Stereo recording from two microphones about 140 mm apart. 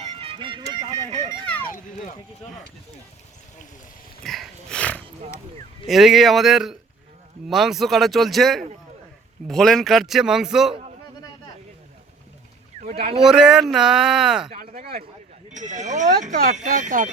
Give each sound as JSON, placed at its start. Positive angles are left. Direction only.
{"t": 0.0, "sound": "music", "side_deg": -40}
{"t": 0.9, "sound": "a sound", "side_deg": -30}
{"t": 4.2, "sound": "speech", "side_deg": 0}
{"t": 5.9, "sound": "speech", "side_deg": 0}
{"t": 12.8, "sound": "speech", "side_deg": -45}
{"t": 13.1, "sound": "speech", "side_deg": -5}
{"t": 14.6, "sound": "speech", "side_deg": -85}
{"t": 15.4, "sound": "speech", "side_deg": -60}